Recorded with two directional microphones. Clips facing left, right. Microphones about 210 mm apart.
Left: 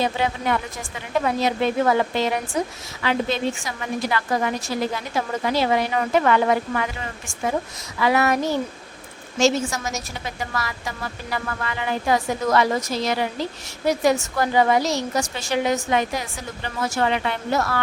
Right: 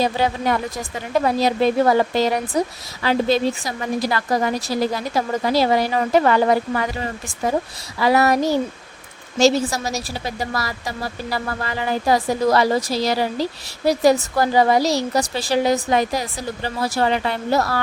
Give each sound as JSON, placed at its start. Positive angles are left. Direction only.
{"t": 0.0, "sound": "a woman's voice", "side_deg": -40}